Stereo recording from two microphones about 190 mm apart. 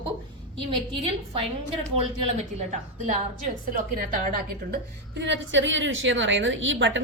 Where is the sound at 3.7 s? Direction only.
45° right (ahead or behind).